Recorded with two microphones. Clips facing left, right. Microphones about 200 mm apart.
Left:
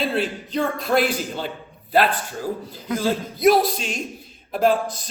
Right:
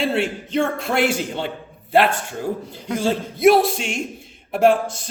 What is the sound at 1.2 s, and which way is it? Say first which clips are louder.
Speech: right 3 dB; 70° right (ahead or behind).